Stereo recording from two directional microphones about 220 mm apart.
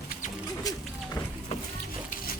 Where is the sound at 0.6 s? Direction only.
15° left (ahead or behind).